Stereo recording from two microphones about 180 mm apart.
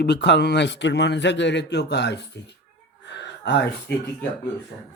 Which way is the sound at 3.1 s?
75° left (ahead or behind).